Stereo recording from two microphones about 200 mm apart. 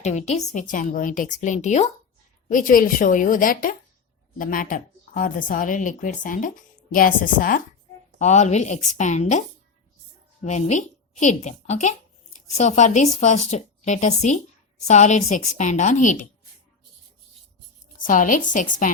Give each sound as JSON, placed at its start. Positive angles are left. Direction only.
{"t": 0.0, "sound": "a woman's voice", "side_deg": 35}
{"t": 10.4, "sound": "a woman's voice", "side_deg": 35}
{"t": 18.0, "sound": "speech", "side_deg": 40}